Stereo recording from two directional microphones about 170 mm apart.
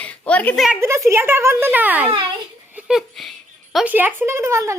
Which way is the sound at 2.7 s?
5° right (ahead or behind).